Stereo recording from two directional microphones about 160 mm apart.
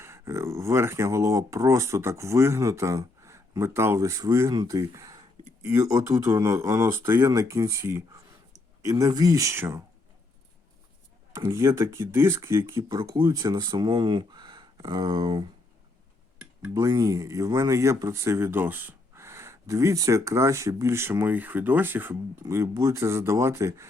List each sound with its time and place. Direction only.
0.0 s speech: 15° right (ahead or behind)
4.9 s a sound: 20° right (ahead or behind)
5.6 s speech: 20° right (ahead or behind)
11.3 s speech: 15° right (ahead or behind)
16.7 s speech: 20° right (ahead or behind)